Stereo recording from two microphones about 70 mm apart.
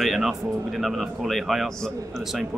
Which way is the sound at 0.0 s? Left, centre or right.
Centre.